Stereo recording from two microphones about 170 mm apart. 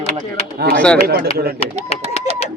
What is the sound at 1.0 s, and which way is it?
Speech, 65° right (ahead or behind).